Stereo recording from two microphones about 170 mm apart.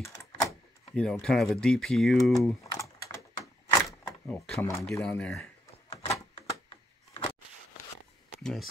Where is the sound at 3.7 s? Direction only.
20° left (ahead or behind).